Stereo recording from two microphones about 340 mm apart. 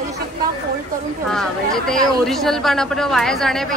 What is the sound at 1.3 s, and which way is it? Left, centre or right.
Speech, centre.